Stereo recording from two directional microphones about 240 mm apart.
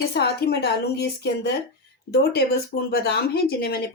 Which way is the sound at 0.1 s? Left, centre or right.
Left.